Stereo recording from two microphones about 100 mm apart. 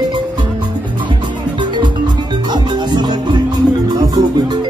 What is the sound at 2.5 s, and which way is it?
Music, 50° right (ahead or behind).